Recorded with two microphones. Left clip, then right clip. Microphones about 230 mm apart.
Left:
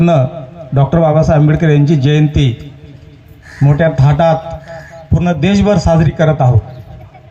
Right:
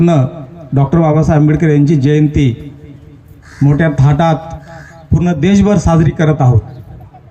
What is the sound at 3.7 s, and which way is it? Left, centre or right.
Speech, centre.